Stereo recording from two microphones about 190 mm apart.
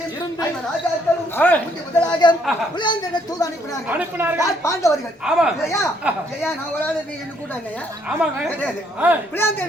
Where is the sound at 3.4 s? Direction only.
20° left (ahead or behind).